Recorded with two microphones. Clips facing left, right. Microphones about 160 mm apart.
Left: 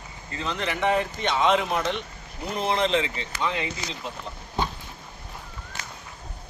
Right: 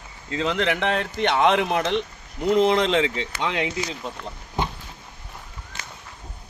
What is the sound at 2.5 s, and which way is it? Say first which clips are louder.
Speech: right 6 dB; 90° right.